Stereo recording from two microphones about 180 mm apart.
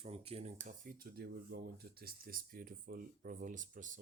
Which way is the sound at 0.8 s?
55° right (ahead or behind).